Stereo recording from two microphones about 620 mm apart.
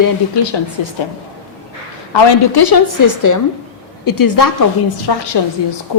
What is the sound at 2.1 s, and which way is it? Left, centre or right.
A woman's voice, left.